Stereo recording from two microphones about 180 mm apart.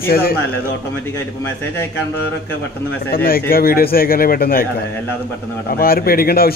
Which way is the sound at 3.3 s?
55° left (ahead or behind).